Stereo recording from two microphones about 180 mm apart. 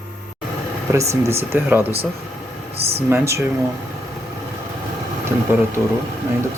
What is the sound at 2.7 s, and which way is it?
Speech, 35° right (ahead or behind).